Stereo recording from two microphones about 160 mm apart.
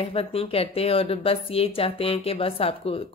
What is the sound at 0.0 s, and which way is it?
Speech, 35° left (ahead or behind).